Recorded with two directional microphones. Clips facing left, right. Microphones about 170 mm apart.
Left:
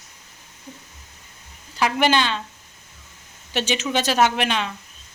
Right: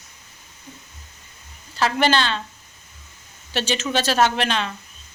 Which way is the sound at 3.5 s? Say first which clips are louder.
Even; 15° left (ahead or behind).